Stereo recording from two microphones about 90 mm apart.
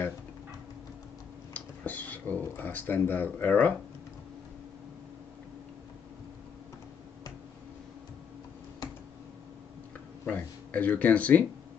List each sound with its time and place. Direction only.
1.5 s speech: 15° left (ahead or behind)
10.2 s speech: 15° left (ahead or behind)